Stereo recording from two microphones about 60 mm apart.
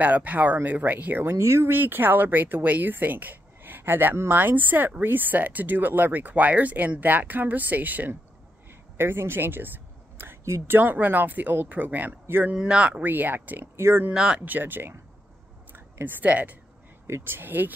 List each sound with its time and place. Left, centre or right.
0.0 s speech: right
1.3 s speech: right
1.7 s speech: right
8.9 s a sound: right
10.4 s speech: right
10.8 s speech: right
12.5 s speech: centre
13.0 s speech: right
13.7 s speech: right
14.1 s speech: centre
14.4 s speech: right
17.1 s speech: right